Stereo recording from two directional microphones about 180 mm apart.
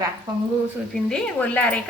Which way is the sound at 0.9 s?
5° left (ahead or behind).